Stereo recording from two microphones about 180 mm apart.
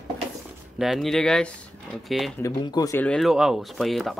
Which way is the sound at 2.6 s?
20° left (ahead or behind).